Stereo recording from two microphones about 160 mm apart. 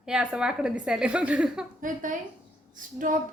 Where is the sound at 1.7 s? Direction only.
55° right (ahead or behind).